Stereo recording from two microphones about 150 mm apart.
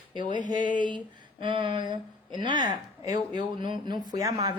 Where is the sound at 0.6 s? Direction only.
60° left (ahead or behind).